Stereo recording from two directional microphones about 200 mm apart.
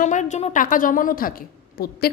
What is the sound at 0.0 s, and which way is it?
A woman's voice, 40° left (ahead or behind).